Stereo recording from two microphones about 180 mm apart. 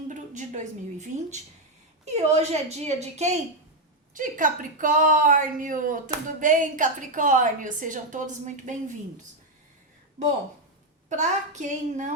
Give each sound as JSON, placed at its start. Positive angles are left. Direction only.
{"t": 0.1, "sound": "a woman's voice", "side_deg": -40}
{"t": 11.1, "sound": "a woman's voice", "side_deg": -40}